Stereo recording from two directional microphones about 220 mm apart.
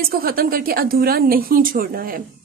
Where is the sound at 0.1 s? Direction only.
40° right (ahead or behind).